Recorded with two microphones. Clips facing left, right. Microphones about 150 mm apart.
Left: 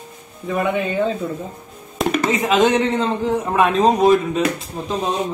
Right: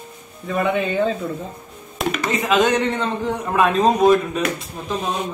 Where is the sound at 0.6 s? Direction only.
5° left (ahead or behind).